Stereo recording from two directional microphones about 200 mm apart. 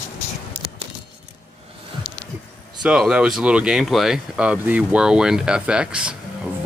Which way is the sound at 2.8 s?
5° right (ahead or behind).